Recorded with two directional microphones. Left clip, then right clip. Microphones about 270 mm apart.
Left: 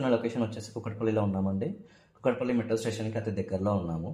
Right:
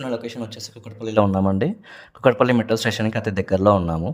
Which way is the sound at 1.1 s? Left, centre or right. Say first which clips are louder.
Right 13 dB; right.